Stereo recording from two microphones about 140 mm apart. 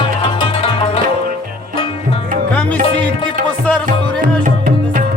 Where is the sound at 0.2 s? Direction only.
40° left (ahead or behind).